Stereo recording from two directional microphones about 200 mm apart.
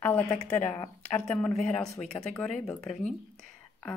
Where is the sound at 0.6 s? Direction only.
10° left (ahead or behind).